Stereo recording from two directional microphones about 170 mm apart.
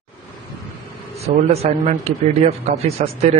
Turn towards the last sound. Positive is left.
turn(degrees=-40)  # may be behind; listen again after turning